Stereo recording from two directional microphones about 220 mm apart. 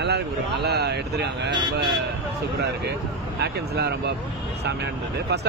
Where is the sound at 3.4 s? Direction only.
50° right (ahead or behind).